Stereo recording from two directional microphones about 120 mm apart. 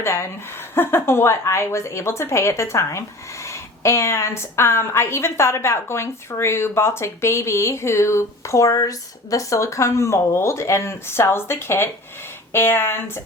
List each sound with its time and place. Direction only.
0.0 s a woman's voice: 20° left (ahead or behind)